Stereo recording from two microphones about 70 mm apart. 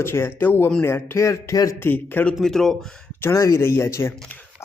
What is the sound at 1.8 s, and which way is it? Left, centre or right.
Speech, left.